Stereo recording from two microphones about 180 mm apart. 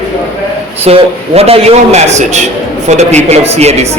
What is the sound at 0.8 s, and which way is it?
Speech, 35° right (ahead or behind).